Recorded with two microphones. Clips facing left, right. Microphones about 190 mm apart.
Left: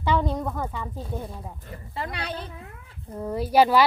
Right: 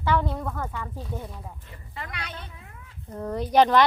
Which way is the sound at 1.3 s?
40° left (ahead or behind).